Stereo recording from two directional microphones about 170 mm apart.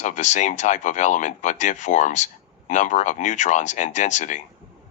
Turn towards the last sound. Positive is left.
turn(degrees=45)  # may be behind; listen again after turning